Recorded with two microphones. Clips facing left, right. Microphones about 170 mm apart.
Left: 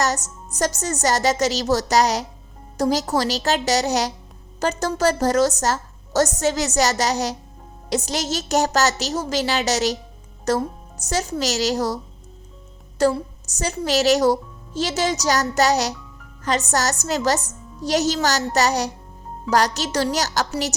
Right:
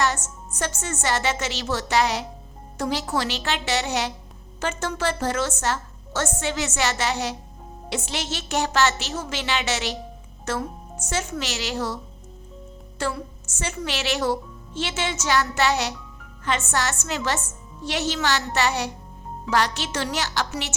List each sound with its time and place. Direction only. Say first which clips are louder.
0.0 s a woman's voice: left 2 dB; 40° left (ahead or behind)
13.0 s a woman's voice: left 9 dB; 40° left (ahead or behind)